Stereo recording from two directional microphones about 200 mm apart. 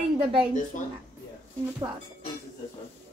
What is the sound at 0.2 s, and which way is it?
Speech, 25° right (ahead or behind).